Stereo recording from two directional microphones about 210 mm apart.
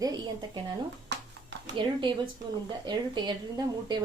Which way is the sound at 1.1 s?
55° right (ahead or behind).